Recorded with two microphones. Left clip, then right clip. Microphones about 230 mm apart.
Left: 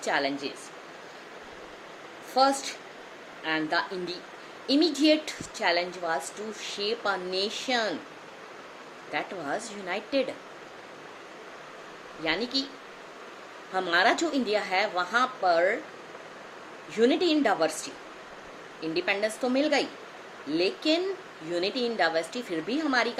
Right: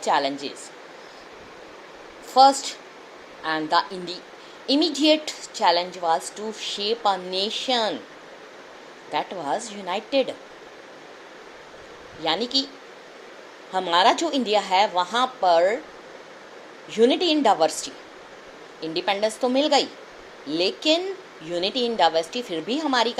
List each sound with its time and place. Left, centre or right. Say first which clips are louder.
0.0 s a woman's voice: right 5 dB; centre
2.3 s a woman's voice: right 8 dB; centre
9.1 s a woman's voice: right 6 dB; centre
12.2 s a woman's voice: right 5 dB; centre
13.7 s a woman's voice: right 5 dB; centre
16.9 s a woman's voice: right 4 dB; centre